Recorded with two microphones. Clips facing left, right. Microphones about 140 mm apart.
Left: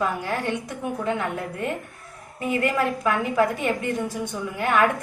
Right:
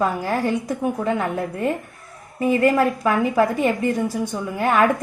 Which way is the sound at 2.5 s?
35° right (ahead or behind).